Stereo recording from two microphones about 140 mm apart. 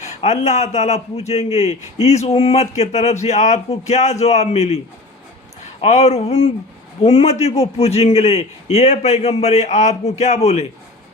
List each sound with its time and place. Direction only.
0.0 s a man's voice: 55° left (ahead or behind)
5.8 s a man's voice: 50° left (ahead or behind)